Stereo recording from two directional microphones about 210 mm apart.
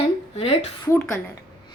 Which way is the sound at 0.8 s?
10° left (ahead or behind).